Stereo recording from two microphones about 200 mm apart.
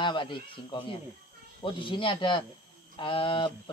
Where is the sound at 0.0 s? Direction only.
25° left (ahead or behind).